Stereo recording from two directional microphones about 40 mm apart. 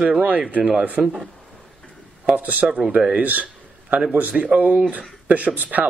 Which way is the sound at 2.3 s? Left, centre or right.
Right.